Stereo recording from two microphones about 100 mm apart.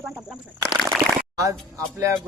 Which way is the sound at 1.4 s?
35° right (ahead or behind).